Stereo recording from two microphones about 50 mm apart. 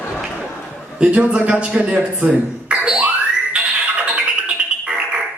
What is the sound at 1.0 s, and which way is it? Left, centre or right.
A man's voice, centre.